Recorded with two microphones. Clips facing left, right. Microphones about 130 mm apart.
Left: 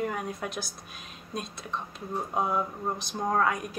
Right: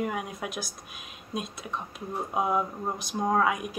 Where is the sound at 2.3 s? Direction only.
10° right (ahead or behind).